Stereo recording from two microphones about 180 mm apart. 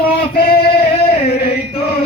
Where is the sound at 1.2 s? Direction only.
60° left (ahead or behind).